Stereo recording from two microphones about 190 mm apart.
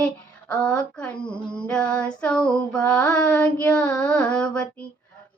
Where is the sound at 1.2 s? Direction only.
5° left (ahead or behind).